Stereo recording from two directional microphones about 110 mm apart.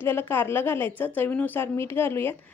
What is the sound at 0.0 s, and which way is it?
A woman's voice, 20° left (ahead or behind).